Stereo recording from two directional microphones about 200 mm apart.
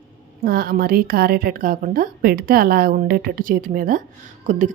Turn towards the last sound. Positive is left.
turn(degrees=-35)  # may be behind; listen again after turning